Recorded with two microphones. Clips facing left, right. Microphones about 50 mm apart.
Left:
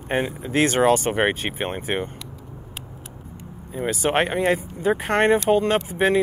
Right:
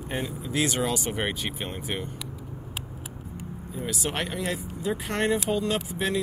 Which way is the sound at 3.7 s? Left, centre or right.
Left.